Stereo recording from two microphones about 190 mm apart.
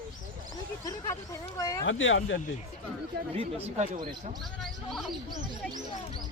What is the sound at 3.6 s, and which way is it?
Speech, 40° right (ahead or behind).